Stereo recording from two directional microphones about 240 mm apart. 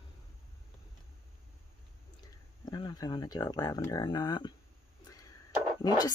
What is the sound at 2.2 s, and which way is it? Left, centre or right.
Speech, centre.